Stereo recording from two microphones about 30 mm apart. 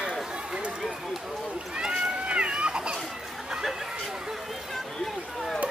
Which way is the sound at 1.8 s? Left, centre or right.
Centre.